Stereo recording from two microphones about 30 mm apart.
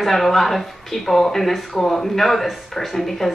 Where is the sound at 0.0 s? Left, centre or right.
Centre.